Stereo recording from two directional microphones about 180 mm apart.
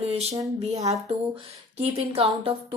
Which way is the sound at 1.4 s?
35° right (ahead or behind).